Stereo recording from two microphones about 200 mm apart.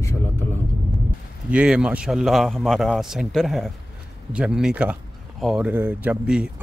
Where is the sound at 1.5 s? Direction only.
5° right (ahead or behind).